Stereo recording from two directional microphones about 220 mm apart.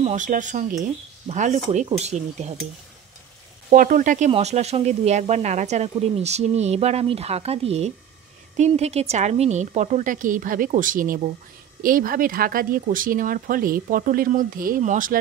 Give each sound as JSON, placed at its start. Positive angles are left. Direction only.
{"t": 0.0, "sound": "speech", "side_deg": -35}
{"t": 3.7, "sound": "speech", "side_deg": -40}